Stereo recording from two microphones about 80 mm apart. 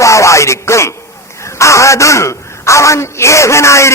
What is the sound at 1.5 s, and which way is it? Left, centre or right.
A woman's voice, left.